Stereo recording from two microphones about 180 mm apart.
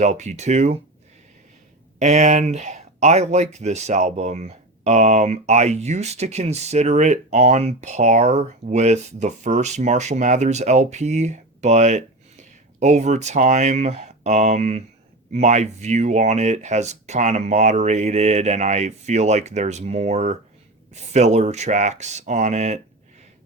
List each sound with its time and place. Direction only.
0.0 s speech: 40° right (ahead or behind)
2.0 s speech: 40° right (ahead or behind)